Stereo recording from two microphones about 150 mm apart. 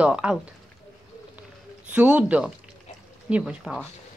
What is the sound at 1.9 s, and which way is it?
A man's voice, 10° right (ahead or behind).